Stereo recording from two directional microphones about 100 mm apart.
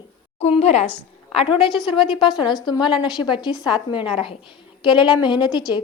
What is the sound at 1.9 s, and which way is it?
A woman's voice, 60° left (ahead or behind).